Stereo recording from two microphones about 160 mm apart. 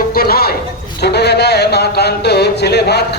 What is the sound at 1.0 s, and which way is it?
Speech, 90° left.